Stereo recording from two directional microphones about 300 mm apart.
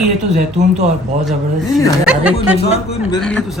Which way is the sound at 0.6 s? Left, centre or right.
Right.